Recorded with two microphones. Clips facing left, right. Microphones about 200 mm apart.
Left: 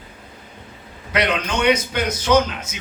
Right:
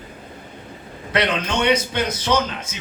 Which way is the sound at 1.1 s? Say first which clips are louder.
Even; 30° right (ahead or behind).